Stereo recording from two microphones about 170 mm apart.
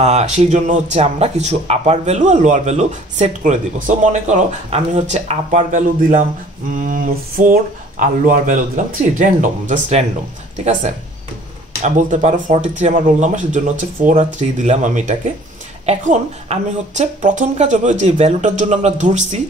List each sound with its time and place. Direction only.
0.0 s speech: 40° right (ahead or behind)